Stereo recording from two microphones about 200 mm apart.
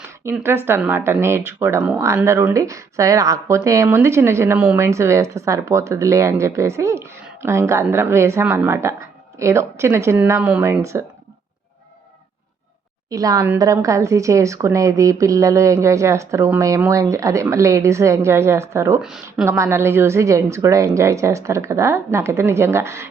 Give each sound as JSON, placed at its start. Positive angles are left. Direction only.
{"t": 0.3, "sound": "speech", "side_deg": -10}
{"t": 13.1, "sound": "speech", "side_deg": -20}
{"t": 19.0, "sound": "speech", "side_deg": -5}
{"t": 19.5, "sound": "speech", "side_deg": -15}